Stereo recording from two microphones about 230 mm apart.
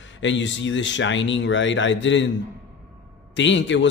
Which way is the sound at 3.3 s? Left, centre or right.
Left.